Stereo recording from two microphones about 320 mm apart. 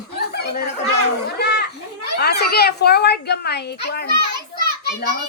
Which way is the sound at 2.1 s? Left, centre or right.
Left.